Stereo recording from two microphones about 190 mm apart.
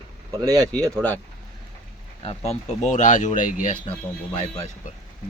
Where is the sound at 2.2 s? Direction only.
35° left (ahead or behind).